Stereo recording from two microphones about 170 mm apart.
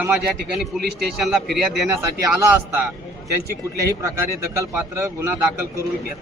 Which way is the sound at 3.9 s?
20° right (ahead or behind).